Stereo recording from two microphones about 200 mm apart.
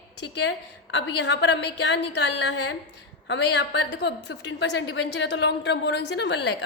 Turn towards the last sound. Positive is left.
turn(degrees=60)  # may be behind; listen again after turning